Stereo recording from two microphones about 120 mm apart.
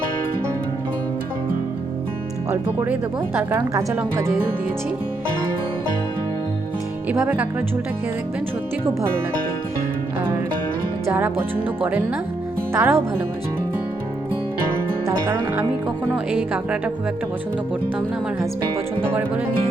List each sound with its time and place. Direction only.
2.5 s speech: 15° right (ahead or behind)
7.1 s speech: 15° right (ahead or behind)
11.1 s speech: 15° right (ahead or behind)
12.7 s speech: 20° right (ahead or behind)
15.0 s speech: 20° right (ahead or behind)